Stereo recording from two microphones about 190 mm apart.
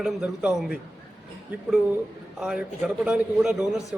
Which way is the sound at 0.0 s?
Centre (ahead or behind).